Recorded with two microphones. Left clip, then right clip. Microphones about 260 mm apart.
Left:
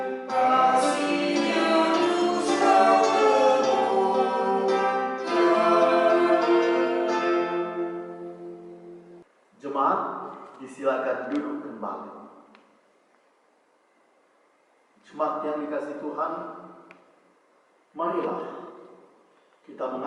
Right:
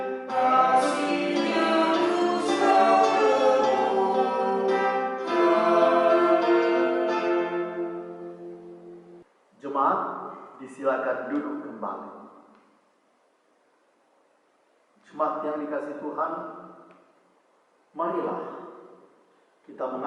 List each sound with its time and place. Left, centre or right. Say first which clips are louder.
0.0 s music: left 1 dB; centre
2.1 s music: even; right
2.4 s music: left 1 dB; centre
9.6 s a sound: even; centre
15.0 s a man's voice: even; centre